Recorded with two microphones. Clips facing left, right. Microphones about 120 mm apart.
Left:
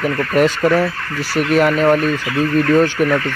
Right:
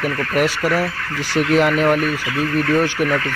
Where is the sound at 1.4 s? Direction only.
20° left (ahead or behind).